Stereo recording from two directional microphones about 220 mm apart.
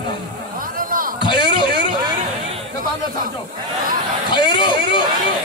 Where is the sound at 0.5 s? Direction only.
40° right (ahead or behind).